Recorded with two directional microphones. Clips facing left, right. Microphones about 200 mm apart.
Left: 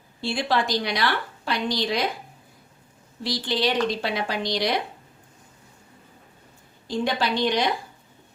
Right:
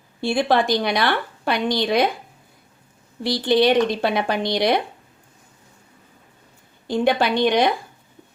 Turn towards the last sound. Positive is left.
turn(degrees=-55)  # may be behind; listen again after turning